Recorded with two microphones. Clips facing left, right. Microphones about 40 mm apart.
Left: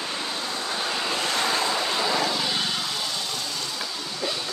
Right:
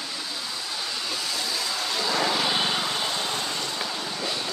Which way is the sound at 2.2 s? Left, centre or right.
Centre.